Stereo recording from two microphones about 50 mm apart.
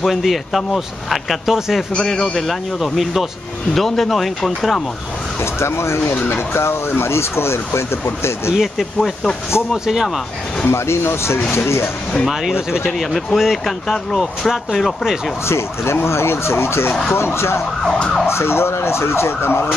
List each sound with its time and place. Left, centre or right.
0.0 s speech: centre
3.7 s speech: centre
5.4 s speech: left
8.5 s speech: centre
10.7 s speech: left
12.8 s speech: centre
15.4 s speech: left